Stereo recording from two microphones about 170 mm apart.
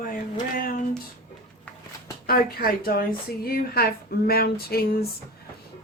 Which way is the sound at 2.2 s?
60° left (ahead or behind).